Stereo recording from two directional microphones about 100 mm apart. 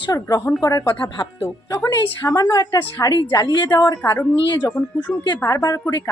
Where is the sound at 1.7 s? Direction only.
35° left (ahead or behind).